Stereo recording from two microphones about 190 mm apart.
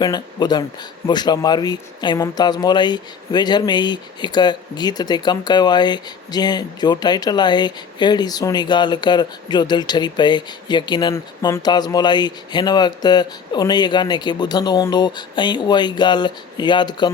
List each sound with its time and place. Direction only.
0.0 s speech: 20° left (ahead or behind)